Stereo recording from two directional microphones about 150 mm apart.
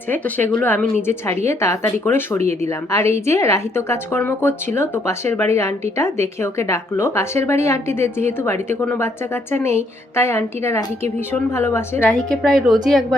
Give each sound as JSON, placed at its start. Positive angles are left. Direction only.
{"t": 0.1, "sound": "a woman's voice", "side_deg": 10}
{"t": 2.4, "sound": "speech", "side_deg": -45}
{"t": 2.6, "sound": "a woman's voice", "side_deg": 20}
{"t": 12.3, "sound": "speech", "side_deg": 5}